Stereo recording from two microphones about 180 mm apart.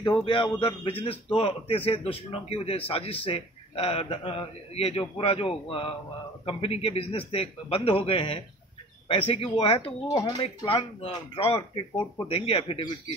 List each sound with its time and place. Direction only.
0.0 s a man's voice: 25° left (ahead or behind)